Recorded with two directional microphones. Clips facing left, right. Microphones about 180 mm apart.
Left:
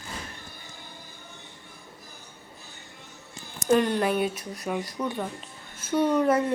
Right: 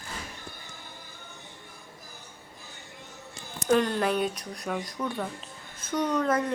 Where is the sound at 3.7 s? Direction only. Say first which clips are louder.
Left 2 dB; 5° left (ahead or behind).